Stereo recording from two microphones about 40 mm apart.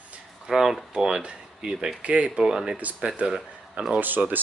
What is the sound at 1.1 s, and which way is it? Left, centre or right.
Speech, right.